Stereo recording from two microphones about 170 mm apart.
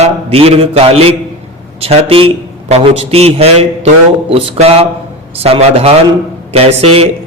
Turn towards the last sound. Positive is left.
turn(degrees=-35)  # may be behind; listen again after turning